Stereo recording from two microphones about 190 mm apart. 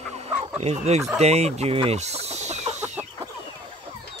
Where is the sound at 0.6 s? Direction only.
35° right (ahead or behind).